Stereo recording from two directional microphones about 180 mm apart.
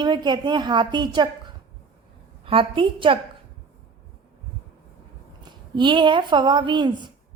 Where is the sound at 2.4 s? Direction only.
30° right (ahead or behind).